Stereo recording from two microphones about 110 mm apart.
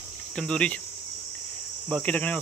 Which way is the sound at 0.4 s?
10° left (ahead or behind).